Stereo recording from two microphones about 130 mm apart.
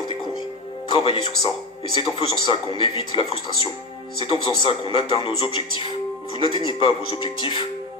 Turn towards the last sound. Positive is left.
turn(degrees=45)  # may be behind; listen again after turning